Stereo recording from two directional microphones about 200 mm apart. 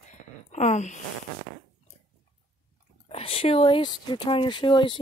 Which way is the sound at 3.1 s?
30° left (ahead or behind).